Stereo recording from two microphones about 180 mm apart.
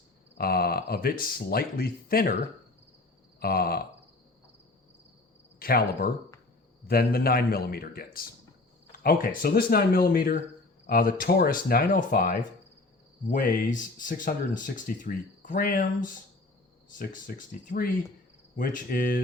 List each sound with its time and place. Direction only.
0.3 s speech: 55° left (ahead or behind)
3.4 s speech: 55° left (ahead or behind)
5.5 s speech: 55° left (ahead or behind)